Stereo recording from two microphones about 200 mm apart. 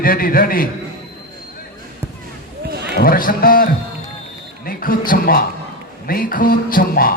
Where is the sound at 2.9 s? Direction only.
45° left (ahead or behind).